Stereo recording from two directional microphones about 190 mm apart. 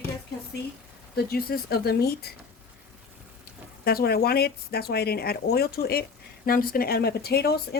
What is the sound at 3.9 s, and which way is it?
Speech, 55° left (ahead or behind).